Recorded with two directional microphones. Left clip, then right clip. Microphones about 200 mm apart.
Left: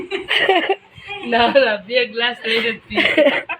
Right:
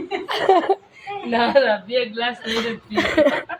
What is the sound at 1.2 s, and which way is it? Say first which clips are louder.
Speech: left 3 dB; 40° left (ahead or behind).